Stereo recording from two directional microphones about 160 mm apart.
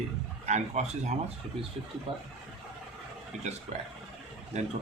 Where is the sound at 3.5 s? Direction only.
45° right (ahead or behind).